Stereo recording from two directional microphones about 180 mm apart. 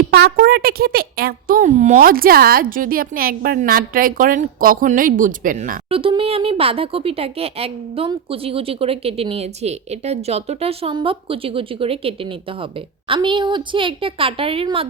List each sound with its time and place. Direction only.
0.1 s a woman's voice: 60° right (ahead or behind)
5.9 s a woman's voice: 30° right (ahead or behind)